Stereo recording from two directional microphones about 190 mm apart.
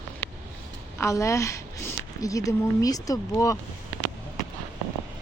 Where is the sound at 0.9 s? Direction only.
15° left (ahead or behind).